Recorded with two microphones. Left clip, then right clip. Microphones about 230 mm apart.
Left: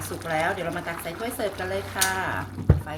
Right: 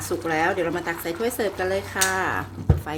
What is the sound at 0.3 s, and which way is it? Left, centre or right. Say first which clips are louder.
Speech: right 3 dB; right.